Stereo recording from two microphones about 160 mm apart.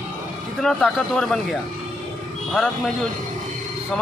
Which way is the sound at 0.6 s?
Centre (ahead or behind).